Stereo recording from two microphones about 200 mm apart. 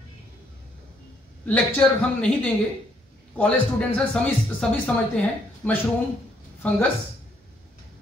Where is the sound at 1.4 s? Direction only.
5° left (ahead or behind).